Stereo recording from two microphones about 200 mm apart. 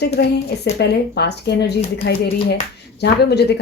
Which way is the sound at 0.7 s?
55° left (ahead or behind).